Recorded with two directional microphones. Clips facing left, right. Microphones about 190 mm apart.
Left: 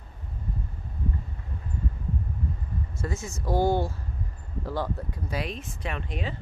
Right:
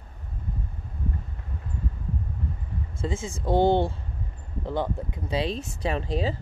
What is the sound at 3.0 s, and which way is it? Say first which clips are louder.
Speech: right 4 dB; 20° right (ahead or behind).